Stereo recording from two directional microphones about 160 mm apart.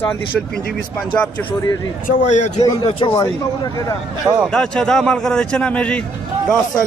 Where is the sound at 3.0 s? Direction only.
20° left (ahead or behind).